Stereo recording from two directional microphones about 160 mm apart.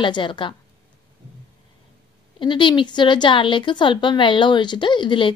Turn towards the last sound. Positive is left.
turn(degrees=30)  # may be behind; listen again after turning